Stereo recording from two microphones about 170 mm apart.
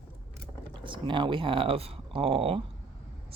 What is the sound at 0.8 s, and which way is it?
Speech, 30° right (ahead or behind).